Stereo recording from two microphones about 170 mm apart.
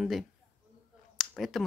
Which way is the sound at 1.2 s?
Centre (ahead or behind).